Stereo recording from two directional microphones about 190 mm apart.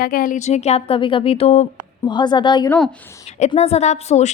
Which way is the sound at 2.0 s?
25° left (ahead or behind).